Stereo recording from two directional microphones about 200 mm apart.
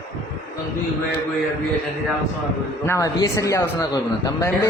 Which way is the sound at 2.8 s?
15° left (ahead or behind).